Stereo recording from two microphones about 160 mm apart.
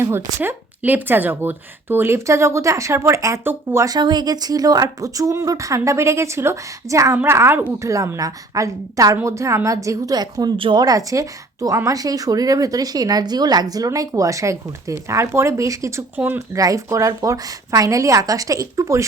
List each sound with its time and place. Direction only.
0.0 s a woman's voice: 15° right (ahead or behind)